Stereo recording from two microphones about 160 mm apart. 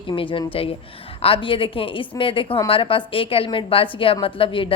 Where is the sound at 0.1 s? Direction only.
30° left (ahead or behind).